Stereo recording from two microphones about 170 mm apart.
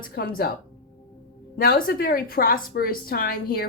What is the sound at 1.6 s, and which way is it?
A woman's voice, 60° left (ahead or behind).